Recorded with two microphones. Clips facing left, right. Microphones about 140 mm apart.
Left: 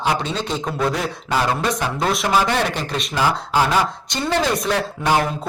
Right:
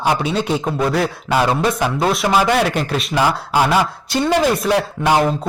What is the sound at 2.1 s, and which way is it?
Speech, 5° right (ahead or behind).